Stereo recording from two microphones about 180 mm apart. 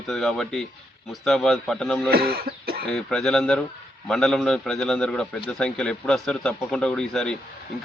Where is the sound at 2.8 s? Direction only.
5° left (ahead or behind).